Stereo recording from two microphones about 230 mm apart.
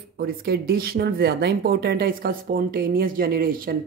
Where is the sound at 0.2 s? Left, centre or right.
Right.